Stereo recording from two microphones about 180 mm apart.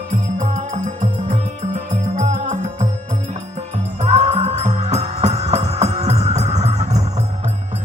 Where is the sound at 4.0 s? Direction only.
35° right (ahead or behind).